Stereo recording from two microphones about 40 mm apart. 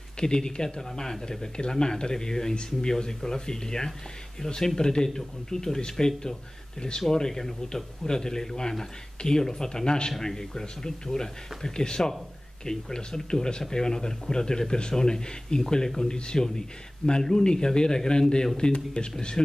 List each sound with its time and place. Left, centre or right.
0.2 s speech: left